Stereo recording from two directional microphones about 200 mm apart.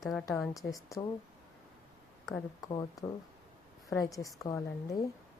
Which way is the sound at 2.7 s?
20° left (ahead or behind).